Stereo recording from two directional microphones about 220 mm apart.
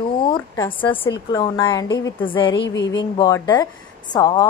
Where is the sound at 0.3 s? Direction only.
20° left (ahead or behind).